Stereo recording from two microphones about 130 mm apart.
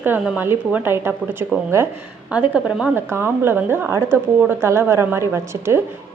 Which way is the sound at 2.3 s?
10° right (ahead or behind).